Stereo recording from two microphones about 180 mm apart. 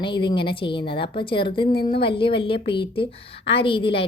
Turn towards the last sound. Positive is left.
turn(degrees=30)  # may be behind; listen again after turning